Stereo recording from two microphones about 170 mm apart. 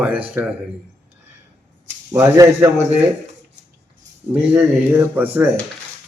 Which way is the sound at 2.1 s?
20° right (ahead or behind).